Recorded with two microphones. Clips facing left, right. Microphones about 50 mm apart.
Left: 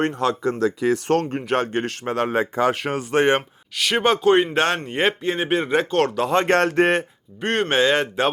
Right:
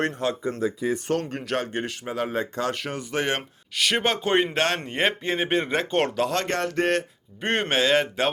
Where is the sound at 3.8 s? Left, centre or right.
Centre.